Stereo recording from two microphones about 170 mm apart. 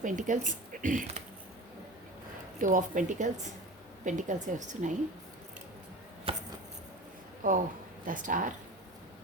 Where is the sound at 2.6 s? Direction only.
50° right (ahead or behind).